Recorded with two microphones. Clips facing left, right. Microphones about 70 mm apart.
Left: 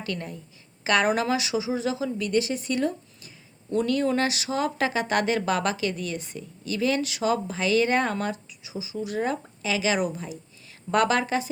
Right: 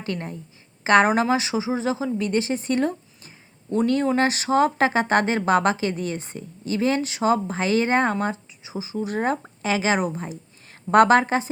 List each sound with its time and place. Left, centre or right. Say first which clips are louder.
0.0 s a woman's voice: right 3 dB; right